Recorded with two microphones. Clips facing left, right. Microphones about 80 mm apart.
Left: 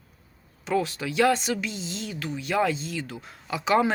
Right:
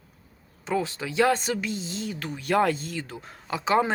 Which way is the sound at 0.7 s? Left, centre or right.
Right.